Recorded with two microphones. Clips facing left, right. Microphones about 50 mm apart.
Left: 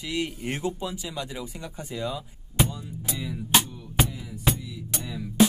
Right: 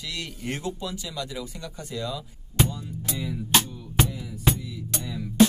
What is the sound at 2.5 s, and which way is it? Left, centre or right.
Music, centre.